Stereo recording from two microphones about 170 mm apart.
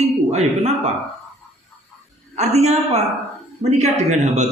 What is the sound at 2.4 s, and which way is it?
A man's voice, 40° right (ahead or behind).